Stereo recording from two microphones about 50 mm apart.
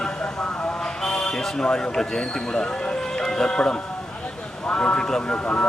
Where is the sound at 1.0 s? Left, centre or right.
Centre.